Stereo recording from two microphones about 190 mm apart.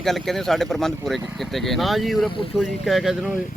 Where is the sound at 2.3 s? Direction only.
30° left (ahead or behind).